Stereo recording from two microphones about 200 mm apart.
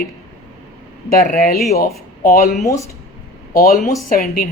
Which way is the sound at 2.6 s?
15° left (ahead or behind).